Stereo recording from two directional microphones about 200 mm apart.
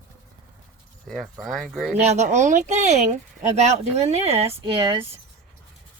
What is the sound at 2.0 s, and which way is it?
Speech, 35° right (ahead or behind).